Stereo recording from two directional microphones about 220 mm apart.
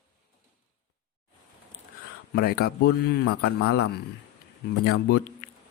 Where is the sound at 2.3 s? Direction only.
45° left (ahead or behind).